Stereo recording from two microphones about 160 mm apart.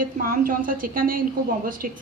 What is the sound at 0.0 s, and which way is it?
A woman's voice, 60° right (ahead or behind).